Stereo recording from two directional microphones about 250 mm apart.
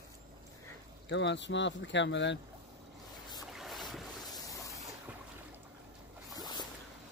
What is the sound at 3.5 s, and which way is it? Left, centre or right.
Boat, centre.